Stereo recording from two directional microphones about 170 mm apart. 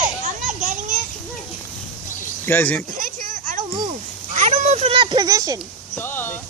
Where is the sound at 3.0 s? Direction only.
45° right (ahead or behind); by 5.5 s 20° right (ahead or behind).